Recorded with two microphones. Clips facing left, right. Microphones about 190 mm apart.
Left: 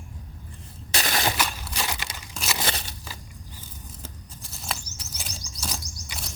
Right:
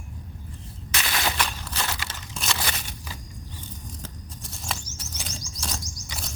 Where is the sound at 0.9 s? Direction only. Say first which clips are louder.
Left 2 dB; 35° left (ahead or behind).